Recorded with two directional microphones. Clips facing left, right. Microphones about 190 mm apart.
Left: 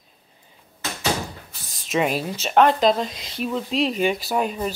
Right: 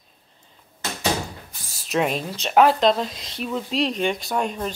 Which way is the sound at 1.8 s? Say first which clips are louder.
Left 1 dB; centre (ahead or behind).